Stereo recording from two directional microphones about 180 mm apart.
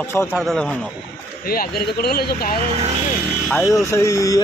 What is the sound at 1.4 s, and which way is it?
Speech, 55° left (ahead or behind).